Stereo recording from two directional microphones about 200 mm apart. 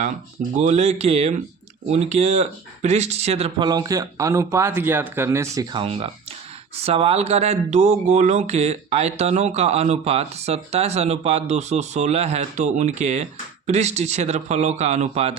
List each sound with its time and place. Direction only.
0.7 s speech: 35° right (ahead or behind); by 5.8 s 15° right (ahead or behind)
5.8 s speech: 30° right (ahead or behind)